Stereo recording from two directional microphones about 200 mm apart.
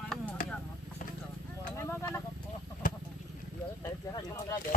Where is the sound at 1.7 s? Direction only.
10° left (ahead or behind).